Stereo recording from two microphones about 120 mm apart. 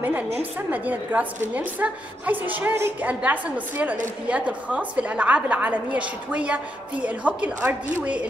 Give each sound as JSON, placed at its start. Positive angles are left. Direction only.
{"t": 0.4, "sound": "a woman's voice", "side_deg": -15}